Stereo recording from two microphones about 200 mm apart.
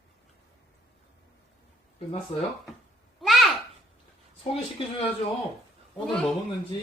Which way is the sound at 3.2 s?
Centre (ahead or behind).